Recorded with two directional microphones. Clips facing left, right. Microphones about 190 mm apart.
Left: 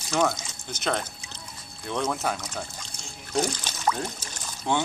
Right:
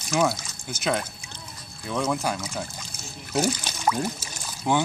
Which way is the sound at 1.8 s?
5° right (ahead or behind).